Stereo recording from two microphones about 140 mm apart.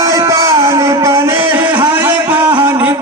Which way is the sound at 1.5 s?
15° right (ahead or behind).